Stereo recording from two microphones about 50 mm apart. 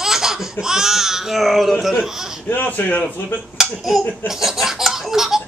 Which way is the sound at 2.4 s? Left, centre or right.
Left.